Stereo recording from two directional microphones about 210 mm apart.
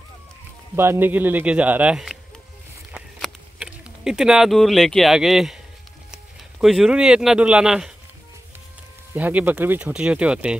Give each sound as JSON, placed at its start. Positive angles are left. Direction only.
{"t": 0.7, "sound": "speech", "side_deg": -10}
{"t": 2.9, "sound": "a sound", "side_deg": -5}
{"t": 6.1, "sound": "speech", "side_deg": 0}
{"t": 9.1, "sound": "speech", "side_deg": -10}